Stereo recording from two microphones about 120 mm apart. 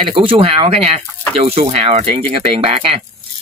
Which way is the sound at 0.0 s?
45° right (ahead or behind).